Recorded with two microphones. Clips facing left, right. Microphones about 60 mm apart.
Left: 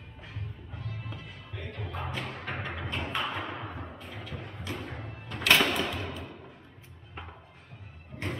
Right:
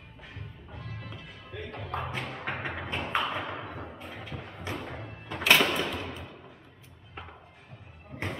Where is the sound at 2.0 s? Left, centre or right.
Centre.